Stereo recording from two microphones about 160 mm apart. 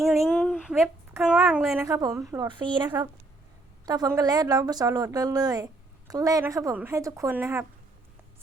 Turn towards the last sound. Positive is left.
turn(degrees=-15)  # may be behind; listen again after turning